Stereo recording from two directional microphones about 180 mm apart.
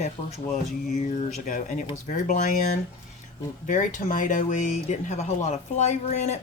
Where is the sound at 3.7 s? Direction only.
45° left (ahead or behind).